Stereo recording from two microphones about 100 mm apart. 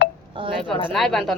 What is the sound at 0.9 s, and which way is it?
Speech, 5° left (ahead or behind).